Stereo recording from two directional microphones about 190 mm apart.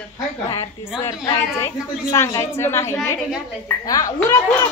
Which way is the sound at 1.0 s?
15° left (ahead or behind).